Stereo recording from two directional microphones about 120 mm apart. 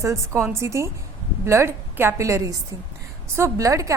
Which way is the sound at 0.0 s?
20° right (ahead or behind).